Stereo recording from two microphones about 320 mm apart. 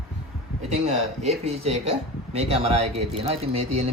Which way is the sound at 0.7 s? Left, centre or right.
Centre.